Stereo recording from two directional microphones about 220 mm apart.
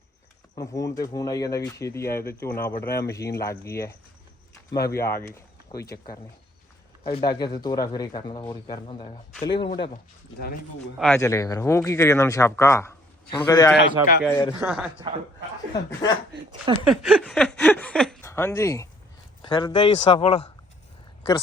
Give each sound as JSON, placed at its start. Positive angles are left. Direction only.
{"t": 0.5, "sound": "speech", "side_deg": 15}
{"t": 4.8, "sound": "a man's voice", "side_deg": 45}
{"t": 5.0, "sound": "speech", "side_deg": 10}
{"t": 7.0, "sound": "speech", "side_deg": 20}
{"t": 10.9, "sound": "speech", "side_deg": 5}
{"t": 11.2, "sound": "speech", "side_deg": 15}
{"t": 13.7, "sound": "a man's voice", "side_deg": 45}
{"t": 14.3, "sound": "speech", "side_deg": 15}
{"t": 14.6, "sound": "speech", "side_deg": -5}
{"t": 15.1, "sound": "a man's voice", "side_deg": -20}
{"t": 15.7, "sound": "speech", "side_deg": 15}
{"t": 16.8, "sound": "speech", "side_deg": 0}